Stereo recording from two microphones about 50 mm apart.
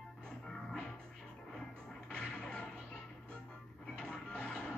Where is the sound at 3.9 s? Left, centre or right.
Centre.